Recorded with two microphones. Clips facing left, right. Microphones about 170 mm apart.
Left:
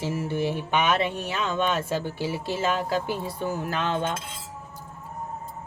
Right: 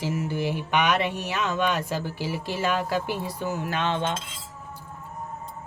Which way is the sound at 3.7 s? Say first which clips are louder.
Right 1 dB; 40° left (ahead or behind).